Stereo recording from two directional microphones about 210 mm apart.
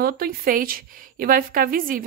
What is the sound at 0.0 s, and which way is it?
A woman's voice, 45° right (ahead or behind).